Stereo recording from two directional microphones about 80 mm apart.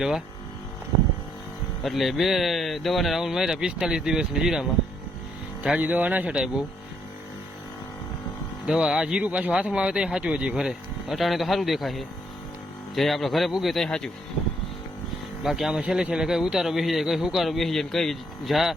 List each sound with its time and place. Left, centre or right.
1.8 s speech: centre
5.6 s speech: centre
8.6 s speech: centre
15.4 s speech: centre